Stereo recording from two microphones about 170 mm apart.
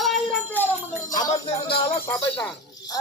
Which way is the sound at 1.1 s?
25° left (ahead or behind).